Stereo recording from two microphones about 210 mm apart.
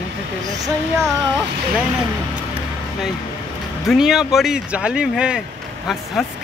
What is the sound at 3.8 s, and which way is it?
Speech, centre (ahead or behind).